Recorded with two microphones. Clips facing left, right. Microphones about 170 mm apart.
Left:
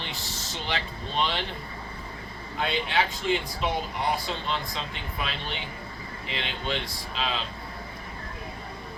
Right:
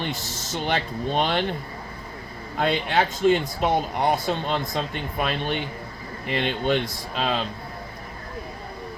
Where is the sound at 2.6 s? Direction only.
50° right (ahead or behind).